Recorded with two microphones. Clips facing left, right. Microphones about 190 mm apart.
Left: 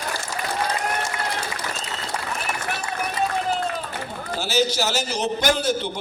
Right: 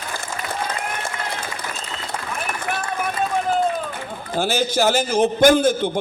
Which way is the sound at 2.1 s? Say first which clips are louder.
Right 1 dB; 50° right (ahead or behind).